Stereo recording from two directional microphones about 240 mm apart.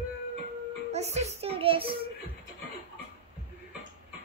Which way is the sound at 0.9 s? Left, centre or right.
Right.